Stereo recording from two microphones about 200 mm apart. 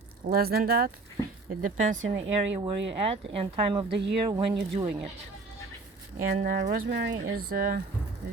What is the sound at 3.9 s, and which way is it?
Speech, 60° right (ahead or behind).